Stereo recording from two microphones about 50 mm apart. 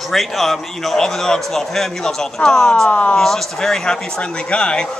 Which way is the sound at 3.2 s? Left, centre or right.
Centre.